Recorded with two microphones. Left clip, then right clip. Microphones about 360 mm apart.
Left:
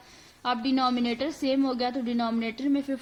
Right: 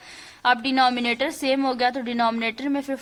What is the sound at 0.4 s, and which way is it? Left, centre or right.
A woman's voice, right.